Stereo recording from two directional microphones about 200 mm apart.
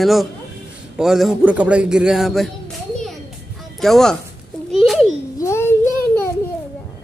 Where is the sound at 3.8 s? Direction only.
Centre (ahead or behind).